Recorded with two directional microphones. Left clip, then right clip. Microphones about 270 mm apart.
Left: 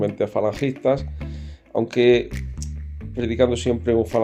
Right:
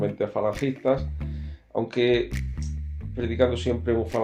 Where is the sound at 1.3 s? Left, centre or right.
Left.